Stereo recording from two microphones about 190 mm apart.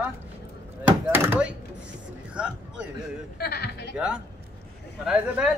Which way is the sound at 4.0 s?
5° right (ahead or behind).